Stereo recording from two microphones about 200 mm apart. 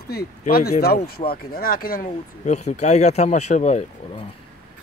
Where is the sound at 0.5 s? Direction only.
50° left (ahead or behind).